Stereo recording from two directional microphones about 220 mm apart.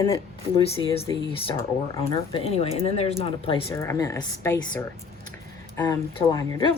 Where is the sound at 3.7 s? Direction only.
10° left (ahead or behind).